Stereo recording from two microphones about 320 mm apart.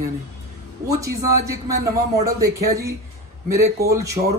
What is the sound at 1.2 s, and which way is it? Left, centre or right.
Speech, centre.